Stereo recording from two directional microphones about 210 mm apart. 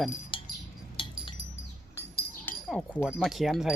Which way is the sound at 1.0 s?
25° left (ahead or behind).